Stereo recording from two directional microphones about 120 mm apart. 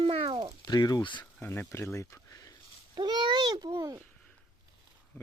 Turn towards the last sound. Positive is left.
turn(degrees=-30)  # may be behind; listen again after turning